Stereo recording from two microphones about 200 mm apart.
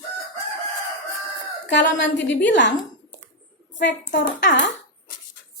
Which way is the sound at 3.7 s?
60° left (ahead or behind).